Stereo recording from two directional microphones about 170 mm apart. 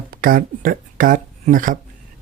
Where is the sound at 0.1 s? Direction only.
60° right (ahead or behind).